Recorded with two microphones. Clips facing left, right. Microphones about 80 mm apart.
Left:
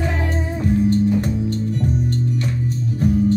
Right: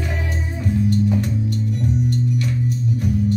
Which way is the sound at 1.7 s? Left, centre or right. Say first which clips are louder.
Even; left.